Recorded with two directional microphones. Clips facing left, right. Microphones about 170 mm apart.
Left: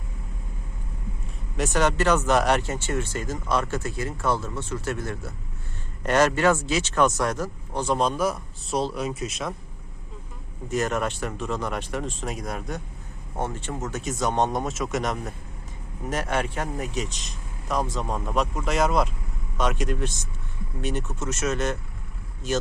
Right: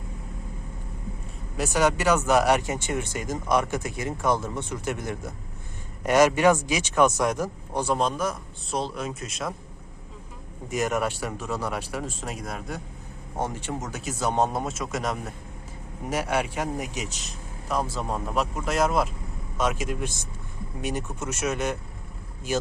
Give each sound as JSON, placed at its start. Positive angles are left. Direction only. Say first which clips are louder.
{"t": 1.5, "sound": "speech", "louder": "even", "side_deg": -5}
{"t": 7.9, "sound": "speech", "louder": "left 2 dB", "side_deg": 0}
{"t": 10.7, "sound": "speech", "louder": "even", "side_deg": -10}
{"t": 13.4, "sound": "speech", "louder": "even", "side_deg": -15}